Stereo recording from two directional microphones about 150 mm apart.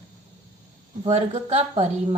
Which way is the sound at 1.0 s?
45° right (ahead or behind).